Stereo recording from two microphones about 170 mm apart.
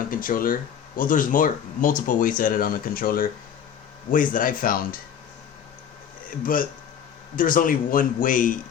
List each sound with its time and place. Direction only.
0.1 s speech: 55° left (ahead or behind)
6.4 s speech: 55° left (ahead or behind)